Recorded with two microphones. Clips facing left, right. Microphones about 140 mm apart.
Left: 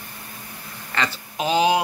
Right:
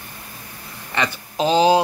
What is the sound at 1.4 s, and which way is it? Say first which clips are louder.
Speech: right 4 dB; 30° right (ahead or behind).